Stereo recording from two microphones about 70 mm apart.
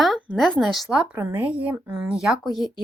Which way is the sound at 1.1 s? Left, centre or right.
Right.